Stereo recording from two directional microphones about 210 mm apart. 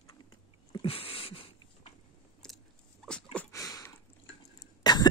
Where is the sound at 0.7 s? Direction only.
25° left (ahead or behind).